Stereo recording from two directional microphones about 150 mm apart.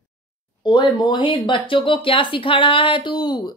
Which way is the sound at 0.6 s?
30° left (ahead or behind).